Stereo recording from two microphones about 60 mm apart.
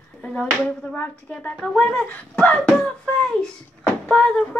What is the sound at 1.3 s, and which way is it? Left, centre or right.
Speech, left.